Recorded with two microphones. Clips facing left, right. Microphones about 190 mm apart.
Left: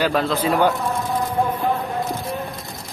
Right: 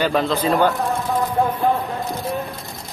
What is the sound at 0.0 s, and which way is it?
Speech, 5° left (ahead or behind).